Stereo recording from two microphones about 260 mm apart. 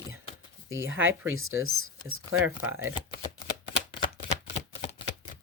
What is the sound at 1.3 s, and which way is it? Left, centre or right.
Speech, right.